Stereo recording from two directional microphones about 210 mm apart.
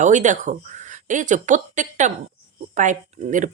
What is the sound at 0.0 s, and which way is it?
Speech, 35° right (ahead or behind).